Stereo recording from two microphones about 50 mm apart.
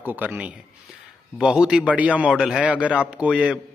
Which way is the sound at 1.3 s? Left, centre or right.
Centre.